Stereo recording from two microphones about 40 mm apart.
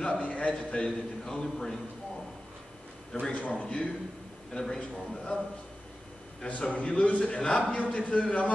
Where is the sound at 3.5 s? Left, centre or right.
Left.